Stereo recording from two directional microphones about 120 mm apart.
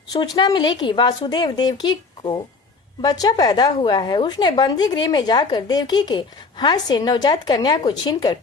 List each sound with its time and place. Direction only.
0.1 s a woman's voice: 35° left (ahead or behind)